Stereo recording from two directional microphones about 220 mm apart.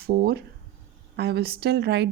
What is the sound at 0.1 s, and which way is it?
Speech, 45° right (ahead or behind).